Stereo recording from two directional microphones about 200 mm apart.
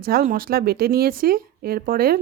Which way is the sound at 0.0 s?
45° right (ahead or behind).